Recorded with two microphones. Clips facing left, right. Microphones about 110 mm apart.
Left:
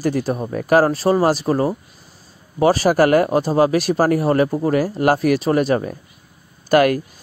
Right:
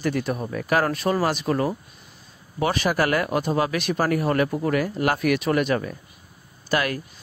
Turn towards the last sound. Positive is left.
turn(degrees=45)  # may be behind; listen again after turning